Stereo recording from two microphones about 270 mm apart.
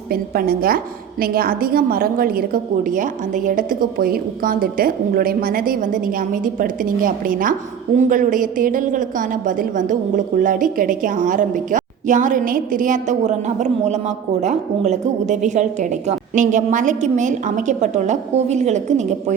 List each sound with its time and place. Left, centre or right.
0.1 s a woman's voice: right